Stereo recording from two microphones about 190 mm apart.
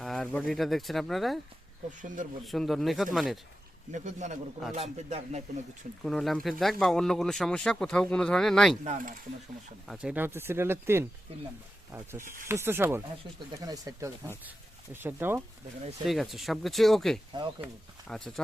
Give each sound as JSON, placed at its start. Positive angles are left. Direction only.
{"t": 0.0, "sound": "speech", "side_deg": 5}
{"t": 2.0, "sound": "speech", "side_deg": -40}
{"t": 2.4, "sound": "speech", "side_deg": 0}
{"t": 3.9, "sound": "speech", "side_deg": -40}
{"t": 6.1, "sound": "speech", "side_deg": 0}
{"t": 8.8, "sound": "speech", "side_deg": -40}
{"t": 9.8, "sound": "speech", "side_deg": -5}
{"t": 16.0, "sound": "speech", "side_deg": 0}